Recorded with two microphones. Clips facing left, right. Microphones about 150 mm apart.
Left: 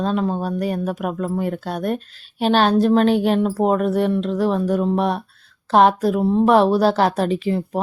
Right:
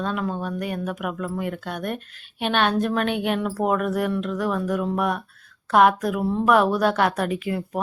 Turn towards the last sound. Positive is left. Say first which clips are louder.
# left 5 dB
turn(degrees=30)  # may be behind; listen again after turning